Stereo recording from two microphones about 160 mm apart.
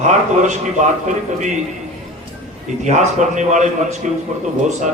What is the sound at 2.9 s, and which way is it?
A man's voice, 50° right (ahead or behind).